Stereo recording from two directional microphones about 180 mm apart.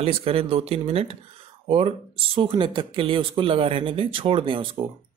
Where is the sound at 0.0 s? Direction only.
30° right (ahead or behind).